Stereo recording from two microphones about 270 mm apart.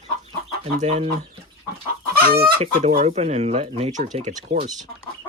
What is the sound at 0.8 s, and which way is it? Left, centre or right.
Speech, right.